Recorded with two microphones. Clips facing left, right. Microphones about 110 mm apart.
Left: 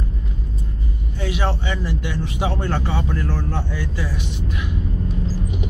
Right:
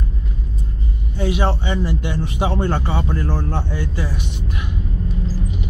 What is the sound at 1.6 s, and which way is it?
Speech, 25° right (ahead or behind).